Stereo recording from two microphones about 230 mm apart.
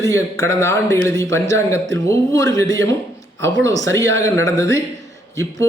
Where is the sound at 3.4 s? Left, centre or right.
Centre.